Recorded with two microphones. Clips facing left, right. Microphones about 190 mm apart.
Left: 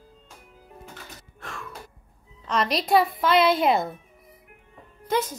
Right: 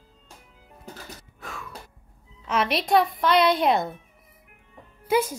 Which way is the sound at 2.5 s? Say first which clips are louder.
Even; 5° right (ahead or behind).